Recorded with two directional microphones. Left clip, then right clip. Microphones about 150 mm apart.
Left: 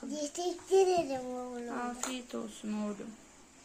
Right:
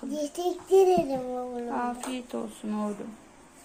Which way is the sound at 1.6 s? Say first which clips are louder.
Right 6 dB; 45° left (ahead or behind).